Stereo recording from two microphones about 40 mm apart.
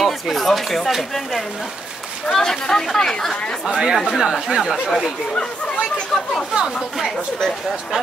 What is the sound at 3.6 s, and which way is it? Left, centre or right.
Speech, centre.